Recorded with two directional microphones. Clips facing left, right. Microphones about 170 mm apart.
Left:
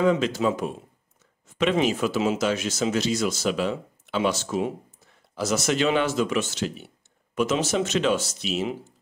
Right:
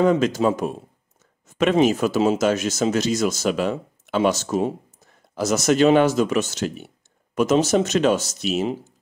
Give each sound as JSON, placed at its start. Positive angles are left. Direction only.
{"t": 0.0, "sound": "speech", "side_deg": -45}